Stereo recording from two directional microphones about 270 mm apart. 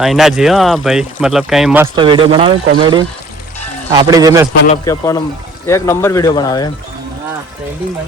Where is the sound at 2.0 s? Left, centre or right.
Centre.